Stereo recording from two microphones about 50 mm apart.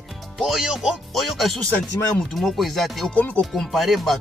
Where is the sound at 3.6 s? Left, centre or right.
Centre.